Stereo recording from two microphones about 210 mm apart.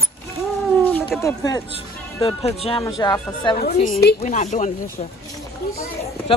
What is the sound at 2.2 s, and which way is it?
Speech, 25° left (ahead or behind).